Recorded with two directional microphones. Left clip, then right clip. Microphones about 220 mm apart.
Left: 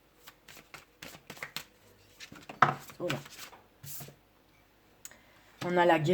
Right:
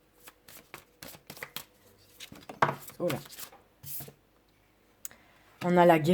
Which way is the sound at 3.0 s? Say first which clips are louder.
Right 5 dB; 40° right (ahead or behind).